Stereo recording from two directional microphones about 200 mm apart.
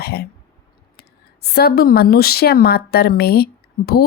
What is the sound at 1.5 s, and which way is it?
A woman's voice, 50° left (ahead or behind).